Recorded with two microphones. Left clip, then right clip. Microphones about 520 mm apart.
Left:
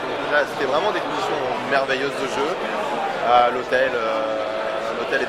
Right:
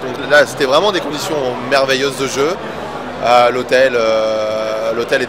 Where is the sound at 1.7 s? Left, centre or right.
Right.